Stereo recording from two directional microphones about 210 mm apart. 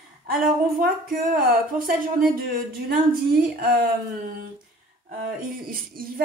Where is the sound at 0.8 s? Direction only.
45° right (ahead or behind).